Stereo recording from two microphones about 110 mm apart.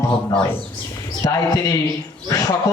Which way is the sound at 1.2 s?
35° left (ahead or behind).